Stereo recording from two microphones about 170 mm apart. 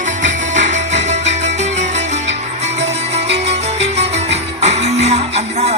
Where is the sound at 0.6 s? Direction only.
45° right (ahead or behind).